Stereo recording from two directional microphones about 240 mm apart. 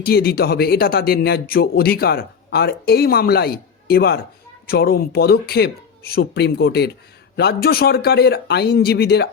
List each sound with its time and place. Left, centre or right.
0.0 s speech: left